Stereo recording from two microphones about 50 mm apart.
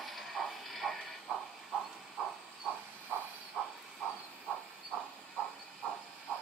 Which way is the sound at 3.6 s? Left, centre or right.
Right.